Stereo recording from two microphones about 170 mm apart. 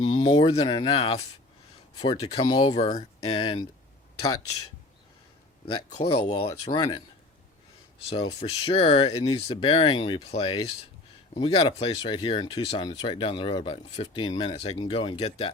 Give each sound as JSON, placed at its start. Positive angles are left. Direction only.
{"t": 0.0, "sound": "speech", "side_deg": 25}
{"t": 2.4, "sound": "speech", "side_deg": 25}
{"t": 5.6, "sound": "speech", "side_deg": 30}
{"t": 8.1, "sound": "speech", "side_deg": 35}